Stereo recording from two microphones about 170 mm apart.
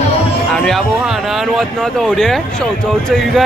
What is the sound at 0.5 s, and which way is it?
Speech, centre (ahead or behind).